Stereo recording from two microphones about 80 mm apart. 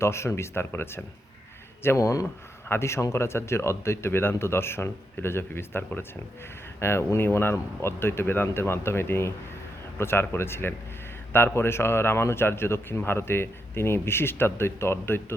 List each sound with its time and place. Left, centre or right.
0.0 s a man's voice: left